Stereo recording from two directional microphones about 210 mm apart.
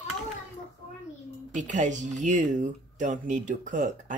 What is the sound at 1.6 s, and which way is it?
Speech, 35° right (ahead or behind).